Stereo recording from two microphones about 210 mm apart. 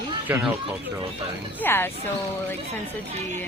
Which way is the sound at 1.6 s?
10° left (ahead or behind).